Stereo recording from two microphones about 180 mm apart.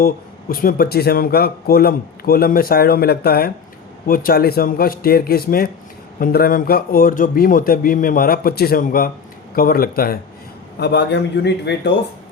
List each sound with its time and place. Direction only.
0.0 s a man's voice: 55° left (ahead or behind)
10.8 s a man's voice: 70° left (ahead or behind)